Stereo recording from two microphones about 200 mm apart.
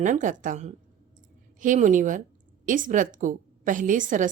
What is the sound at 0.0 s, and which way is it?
A woman's voice, 40° right (ahead or behind).